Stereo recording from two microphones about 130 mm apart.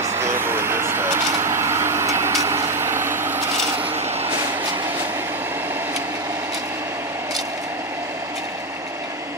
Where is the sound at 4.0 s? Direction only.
55° right (ahead or behind).